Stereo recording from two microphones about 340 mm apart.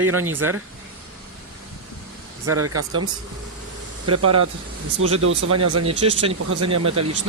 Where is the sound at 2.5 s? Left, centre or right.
Right.